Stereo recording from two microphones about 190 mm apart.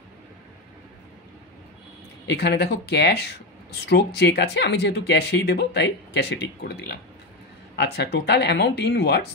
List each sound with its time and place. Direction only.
2.2 s speech: 60° left (ahead or behind)